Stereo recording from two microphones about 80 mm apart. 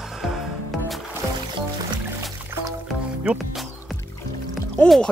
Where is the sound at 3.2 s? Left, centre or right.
Centre.